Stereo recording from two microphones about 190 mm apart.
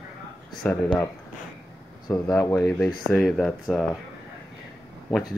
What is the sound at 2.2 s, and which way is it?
Speech, 15° left (ahead or behind).